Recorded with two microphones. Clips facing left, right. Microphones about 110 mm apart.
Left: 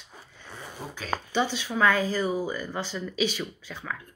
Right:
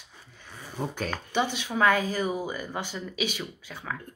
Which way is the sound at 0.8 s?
50° right (ahead or behind).